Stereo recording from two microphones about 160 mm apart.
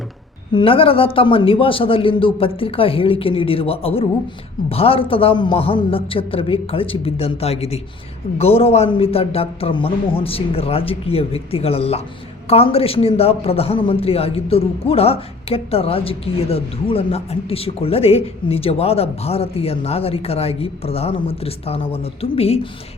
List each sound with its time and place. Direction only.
0.5 s a man's voice: 35° left (ahead or behind)